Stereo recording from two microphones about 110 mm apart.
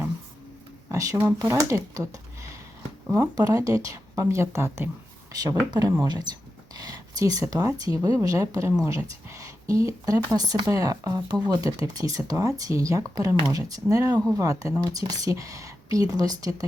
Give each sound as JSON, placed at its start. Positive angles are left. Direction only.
{"t": 0.9, "sound": "speech", "side_deg": -30}
{"t": 5.3, "sound": "speech", "side_deg": -35}